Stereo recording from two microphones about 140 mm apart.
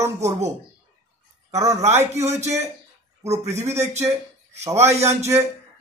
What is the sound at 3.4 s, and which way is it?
Speech, 20° right (ahead or behind).